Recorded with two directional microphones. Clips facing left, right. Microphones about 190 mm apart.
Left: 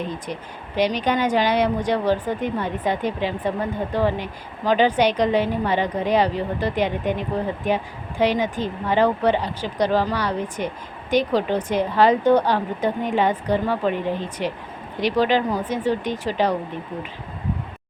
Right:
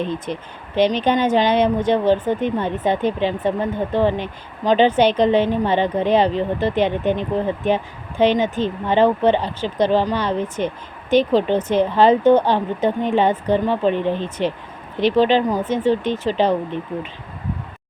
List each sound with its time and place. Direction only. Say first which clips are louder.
0.3 s speech: right 3 dB; 25° right (ahead or behind)
15.0 s speech: right 4 dB; 25° right (ahead or behind)